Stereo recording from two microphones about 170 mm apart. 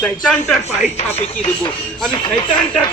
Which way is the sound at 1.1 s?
35° left (ahead or behind).